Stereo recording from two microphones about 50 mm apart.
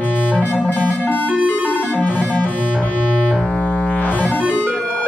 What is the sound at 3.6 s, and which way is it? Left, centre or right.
Music, left.